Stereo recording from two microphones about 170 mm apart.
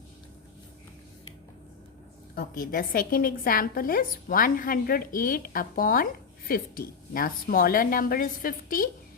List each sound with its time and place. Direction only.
2.3 s a woman's voice: 60° left (ahead or behind)